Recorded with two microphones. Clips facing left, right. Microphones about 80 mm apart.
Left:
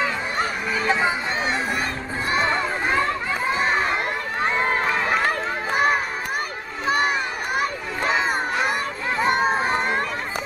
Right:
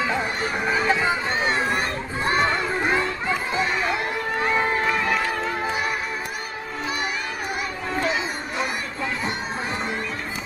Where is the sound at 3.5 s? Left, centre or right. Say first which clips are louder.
Left 4 dB; left.